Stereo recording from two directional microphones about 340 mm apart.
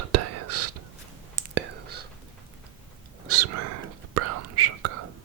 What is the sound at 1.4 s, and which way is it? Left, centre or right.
Whispering, right.